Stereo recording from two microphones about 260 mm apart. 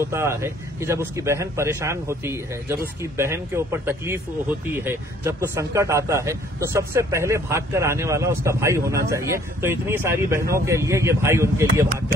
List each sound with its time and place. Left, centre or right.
0.0 s speech: centre